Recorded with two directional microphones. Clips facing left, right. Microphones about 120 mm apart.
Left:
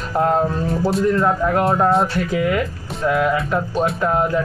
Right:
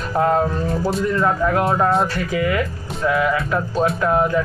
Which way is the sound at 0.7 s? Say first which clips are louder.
Left 2 dB; centre (ahead or behind).